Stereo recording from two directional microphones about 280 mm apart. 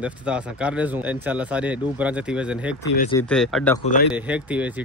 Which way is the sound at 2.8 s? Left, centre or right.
Left.